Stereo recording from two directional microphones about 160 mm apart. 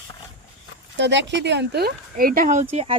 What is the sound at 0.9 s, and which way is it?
Speech, 90° right.